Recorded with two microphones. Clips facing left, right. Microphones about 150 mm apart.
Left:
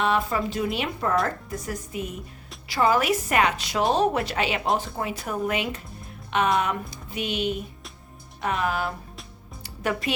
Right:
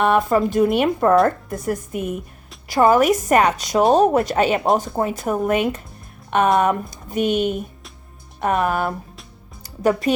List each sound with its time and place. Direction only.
0.0 s a woman's voice: 50° right (ahead or behind)